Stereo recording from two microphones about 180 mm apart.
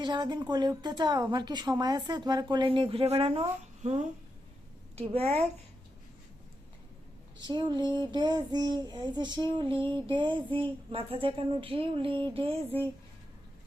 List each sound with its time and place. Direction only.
0.0 s a woman's voice: 25° right (ahead or behind)
7.4 s a woman's voice: 25° right (ahead or behind)